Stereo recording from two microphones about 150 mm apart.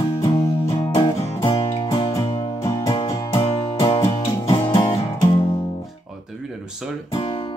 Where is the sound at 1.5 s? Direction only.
40° left (ahead or behind).